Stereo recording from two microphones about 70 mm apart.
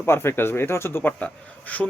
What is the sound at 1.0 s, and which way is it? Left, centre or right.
Speech, left.